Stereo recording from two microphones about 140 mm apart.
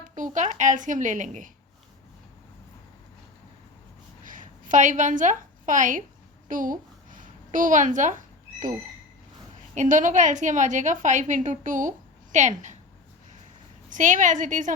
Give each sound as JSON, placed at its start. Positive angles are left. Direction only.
{"t": 0.2, "sound": "a woman's voice", "side_deg": -60}
{"t": 4.2, "sound": "a sound", "side_deg": -70}
{"t": 6.5, "sound": "a woman's voice", "side_deg": -70}
{"t": 9.7, "sound": "a woman's voice", "side_deg": -65}
{"t": 13.9, "sound": "a woman's voice", "side_deg": -65}